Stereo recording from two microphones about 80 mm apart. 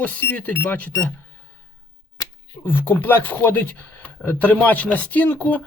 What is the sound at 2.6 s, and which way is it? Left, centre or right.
Speech, left.